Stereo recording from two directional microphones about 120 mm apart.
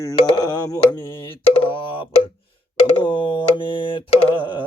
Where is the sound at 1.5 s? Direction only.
45° left (ahead or behind).